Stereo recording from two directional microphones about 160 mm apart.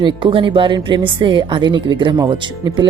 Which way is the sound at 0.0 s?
30° right (ahead or behind).